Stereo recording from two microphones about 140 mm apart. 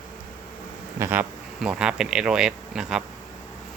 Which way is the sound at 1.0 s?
15° right (ahead or behind).